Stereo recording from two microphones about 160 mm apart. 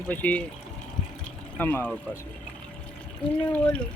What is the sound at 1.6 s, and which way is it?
Speech, 10° left (ahead or behind).